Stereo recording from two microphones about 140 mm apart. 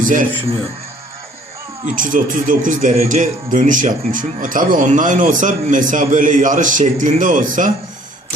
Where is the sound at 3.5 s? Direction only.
65° right (ahead or behind).